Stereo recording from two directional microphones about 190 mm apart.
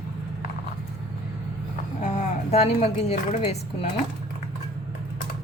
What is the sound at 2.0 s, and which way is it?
A woman's voice, 40° left (ahead or behind).